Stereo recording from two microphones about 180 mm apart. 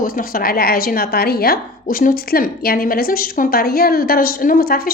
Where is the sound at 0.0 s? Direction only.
55° left (ahead or behind).